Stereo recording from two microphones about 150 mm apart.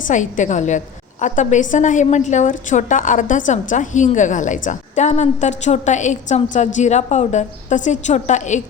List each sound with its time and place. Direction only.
0.1 s a woman's voice: 55° left (ahead or behind)